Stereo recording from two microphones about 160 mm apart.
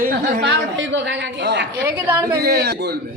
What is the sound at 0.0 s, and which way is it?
Speech, 65° right (ahead or behind).